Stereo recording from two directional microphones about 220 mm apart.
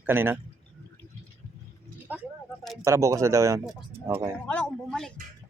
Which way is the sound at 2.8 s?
15° right (ahead or behind).